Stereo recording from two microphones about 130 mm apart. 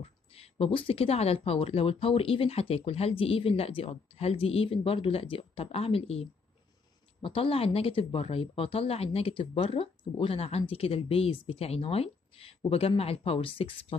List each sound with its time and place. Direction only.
0.0 s speech: 50° left (ahead or behind)